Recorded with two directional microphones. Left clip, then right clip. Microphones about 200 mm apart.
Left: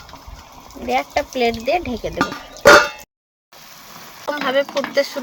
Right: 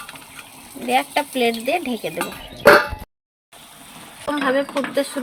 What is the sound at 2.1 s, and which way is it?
Roaring cats, 30° left (ahead or behind).